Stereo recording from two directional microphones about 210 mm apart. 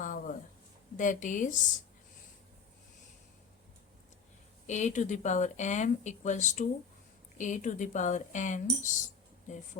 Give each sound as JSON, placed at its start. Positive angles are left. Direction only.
{"t": 0.0, "sound": "a sound", "side_deg": 40}
{"t": 0.9, "sound": "speech", "side_deg": 35}
{"t": 4.6, "sound": "speech", "side_deg": 35}